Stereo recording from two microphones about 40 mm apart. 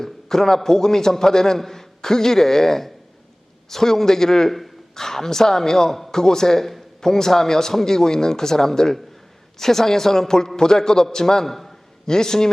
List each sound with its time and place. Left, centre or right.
0.0 s a man's voice: centre